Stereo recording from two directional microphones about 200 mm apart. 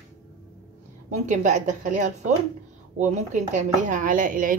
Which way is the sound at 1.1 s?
35° right (ahead or behind).